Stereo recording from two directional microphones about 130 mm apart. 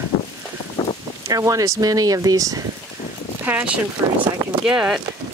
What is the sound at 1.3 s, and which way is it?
Speech, 25° right (ahead or behind).